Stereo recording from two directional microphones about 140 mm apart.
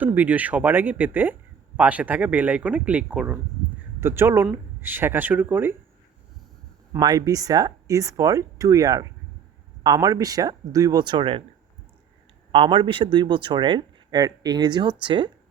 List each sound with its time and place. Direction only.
0.0 s speech: 10° right (ahead or behind)
7.0 s speech: 25° right (ahead or behind)
12.5 s speech: 35° right (ahead or behind)